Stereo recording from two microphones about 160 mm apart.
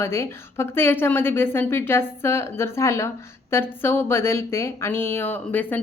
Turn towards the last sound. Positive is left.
turn(degrees=10)  # may be behind; listen again after turning